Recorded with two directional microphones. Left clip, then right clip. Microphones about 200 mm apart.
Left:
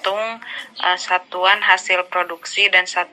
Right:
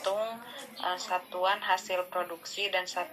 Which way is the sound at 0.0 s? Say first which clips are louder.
Left 10 dB; 15° left (ahead or behind).